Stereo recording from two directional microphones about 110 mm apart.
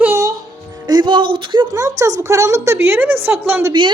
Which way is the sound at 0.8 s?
40° right (ahead or behind).